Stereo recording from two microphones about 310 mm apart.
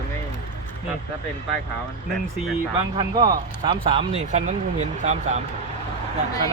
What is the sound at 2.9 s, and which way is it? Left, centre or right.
Speech, centre.